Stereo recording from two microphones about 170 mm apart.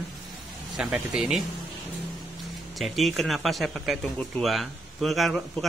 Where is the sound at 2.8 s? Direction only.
Centre (ahead or behind).